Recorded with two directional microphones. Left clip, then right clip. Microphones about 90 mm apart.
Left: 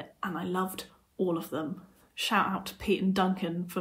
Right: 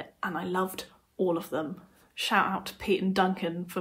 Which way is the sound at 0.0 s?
25° right (ahead or behind).